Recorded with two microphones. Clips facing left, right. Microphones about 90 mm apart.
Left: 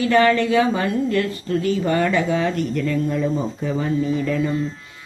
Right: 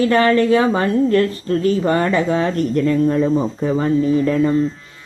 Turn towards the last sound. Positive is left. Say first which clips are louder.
# right 5 dB
turn(degrees=-40)  # may be behind; listen again after turning